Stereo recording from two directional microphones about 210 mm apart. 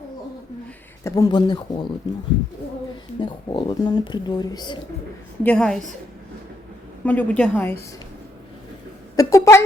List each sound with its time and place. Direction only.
1.0 s speech: 15° left (ahead or behind)
3.2 s speech: 20° left (ahead or behind)
5.4 s a woman's voice: 5° left (ahead or behind)
7.0 s a woman's voice: 5° left (ahead or behind)
9.1 s a woman's voice: 15° left (ahead or behind)